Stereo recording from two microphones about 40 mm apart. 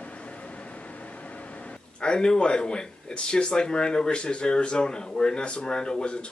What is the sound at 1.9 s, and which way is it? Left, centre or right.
Speech, left.